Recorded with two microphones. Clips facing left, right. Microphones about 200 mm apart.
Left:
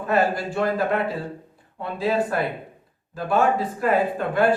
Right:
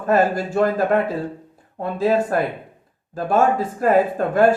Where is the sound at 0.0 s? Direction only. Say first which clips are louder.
Right 4 dB; 45° right (ahead or behind).